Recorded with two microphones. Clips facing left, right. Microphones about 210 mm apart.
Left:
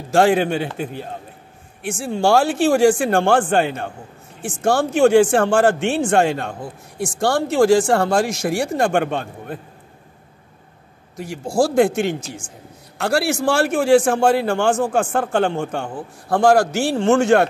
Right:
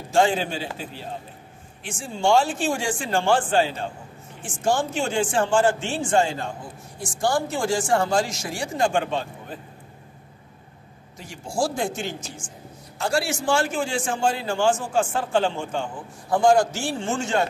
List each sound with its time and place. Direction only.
0.1 s a man's voice: 65° left (ahead or behind)
1.9 s a man's voice: 65° left (ahead or behind)
11.1 s a man's voice: 65° left (ahead or behind)